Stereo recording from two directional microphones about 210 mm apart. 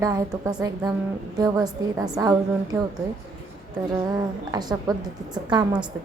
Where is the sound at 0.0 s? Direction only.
15° right (ahead or behind).